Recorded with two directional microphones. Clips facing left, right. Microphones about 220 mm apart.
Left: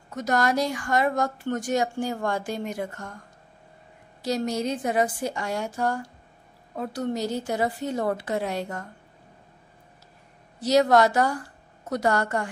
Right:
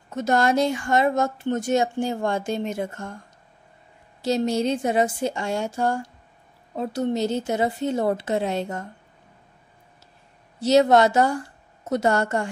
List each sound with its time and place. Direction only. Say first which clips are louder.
0.1 s speech: right 3 dB; 25° right (ahead or behind)
4.2 s speech: right 4 dB; 25° right (ahead or behind)
10.6 s speech: right 3 dB; 25° right (ahead or behind)